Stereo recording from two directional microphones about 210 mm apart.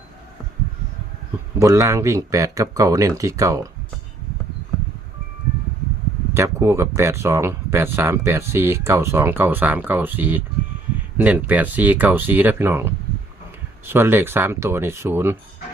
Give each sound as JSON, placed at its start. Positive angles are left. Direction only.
{"t": 1.5, "sound": "speech", "side_deg": -15}
{"t": 6.3, "sound": "speech", "side_deg": -10}